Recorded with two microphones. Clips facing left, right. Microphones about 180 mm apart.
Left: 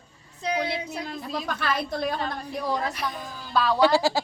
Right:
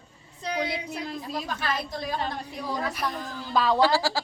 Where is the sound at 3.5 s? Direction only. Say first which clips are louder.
Right 1 dB; 20° right (ahead or behind).